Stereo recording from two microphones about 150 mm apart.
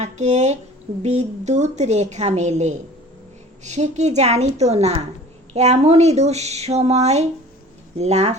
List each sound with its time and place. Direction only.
0.0 s a woman's voice: 50° right (ahead or behind)